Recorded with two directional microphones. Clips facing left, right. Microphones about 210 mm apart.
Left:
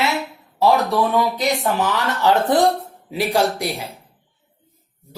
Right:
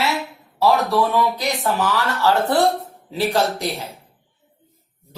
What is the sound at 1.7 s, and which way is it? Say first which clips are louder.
Speech: even; 20° left (ahead or behind).